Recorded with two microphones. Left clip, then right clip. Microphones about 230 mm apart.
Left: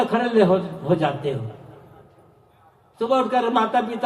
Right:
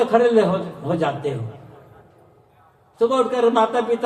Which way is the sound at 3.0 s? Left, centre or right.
Left.